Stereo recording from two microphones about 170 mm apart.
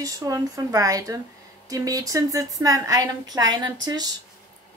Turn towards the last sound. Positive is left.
turn(degrees=-25)  # may be behind; listen again after turning